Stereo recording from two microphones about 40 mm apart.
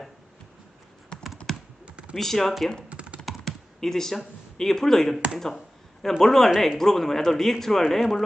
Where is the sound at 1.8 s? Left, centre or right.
Right.